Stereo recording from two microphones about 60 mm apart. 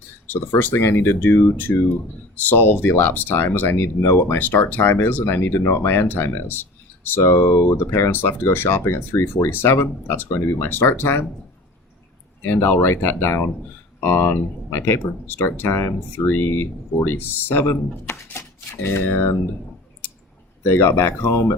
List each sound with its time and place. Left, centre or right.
0.3 s speech: left
7.3 s speech: left
12.5 s speech: left
20.7 s speech: left